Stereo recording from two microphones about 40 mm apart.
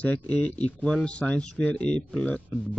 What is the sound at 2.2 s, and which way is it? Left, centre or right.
Speech, left.